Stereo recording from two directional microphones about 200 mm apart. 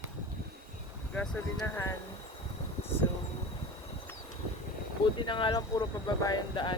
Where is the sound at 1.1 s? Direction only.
5° left (ahead or behind).